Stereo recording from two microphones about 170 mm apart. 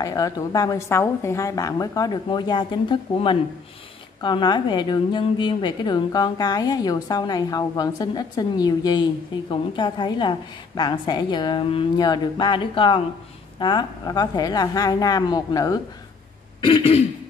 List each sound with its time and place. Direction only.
0.0 s a woman's voice: 20° left (ahead or behind)
16.6 s throat clearing: 35° left (ahead or behind)